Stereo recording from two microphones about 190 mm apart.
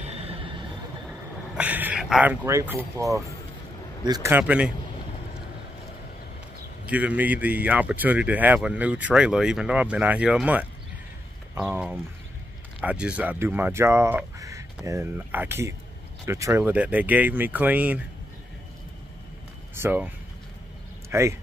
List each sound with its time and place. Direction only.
0.3 s a sound: 30° right (ahead or behind)
1.6 s speech: 10° right (ahead or behind)
6.9 s speech: 10° right (ahead or behind)
19.7 s speech: 10° right (ahead or behind)
21.1 s speech: 15° right (ahead or behind)